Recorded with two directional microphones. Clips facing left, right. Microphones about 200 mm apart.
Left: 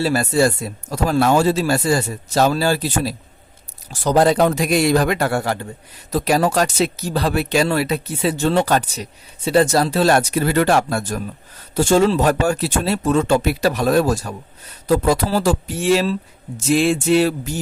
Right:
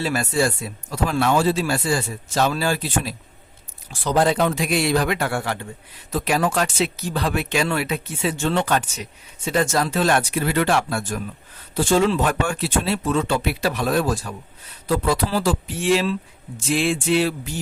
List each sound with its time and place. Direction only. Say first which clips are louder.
0.0 s speech: left 5 dB; 40° left (ahead or behind)